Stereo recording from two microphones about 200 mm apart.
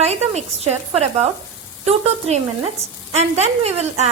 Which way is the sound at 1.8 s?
30° right (ahead or behind).